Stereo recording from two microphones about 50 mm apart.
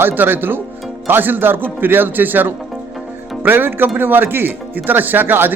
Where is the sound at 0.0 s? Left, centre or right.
Right.